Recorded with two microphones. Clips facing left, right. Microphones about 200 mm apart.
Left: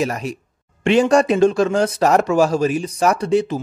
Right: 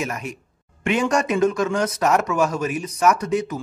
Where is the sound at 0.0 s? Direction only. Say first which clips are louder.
Left 6 dB; 35° left (ahead or behind).